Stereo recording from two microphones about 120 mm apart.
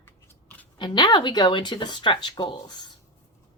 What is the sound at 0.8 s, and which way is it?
Speech, 40° left (ahead or behind).